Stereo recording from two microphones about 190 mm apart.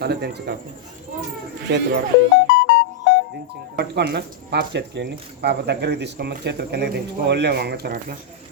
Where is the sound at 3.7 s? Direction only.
60° right (ahead or behind).